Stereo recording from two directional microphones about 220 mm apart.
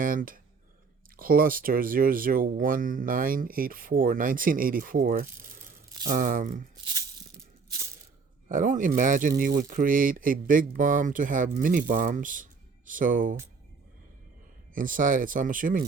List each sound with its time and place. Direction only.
0.0 s speech: 40° right (ahead or behind)
8.4 s speech: 35° right (ahead or behind)
14.7 s speech: 40° right (ahead or behind)